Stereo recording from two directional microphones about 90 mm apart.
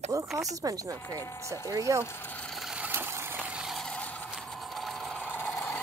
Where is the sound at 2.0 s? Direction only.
25° left (ahead or behind).